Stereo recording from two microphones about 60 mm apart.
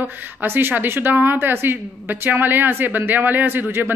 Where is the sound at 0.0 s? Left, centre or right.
Right.